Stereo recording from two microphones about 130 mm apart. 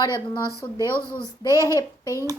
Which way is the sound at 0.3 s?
25° left (ahead or behind).